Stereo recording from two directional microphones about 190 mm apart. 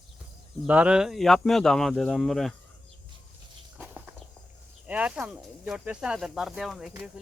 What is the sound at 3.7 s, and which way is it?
Walk, 10° right (ahead or behind).